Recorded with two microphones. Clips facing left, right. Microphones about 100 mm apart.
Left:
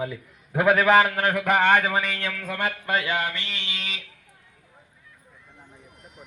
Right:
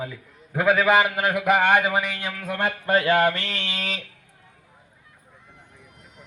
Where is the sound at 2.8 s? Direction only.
35° right (ahead or behind).